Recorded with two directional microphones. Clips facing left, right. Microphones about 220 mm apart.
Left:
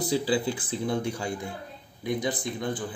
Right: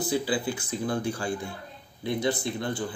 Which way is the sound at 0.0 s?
35° left (ahead or behind).